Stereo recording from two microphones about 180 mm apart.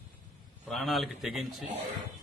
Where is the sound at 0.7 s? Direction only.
Centre (ahead or behind).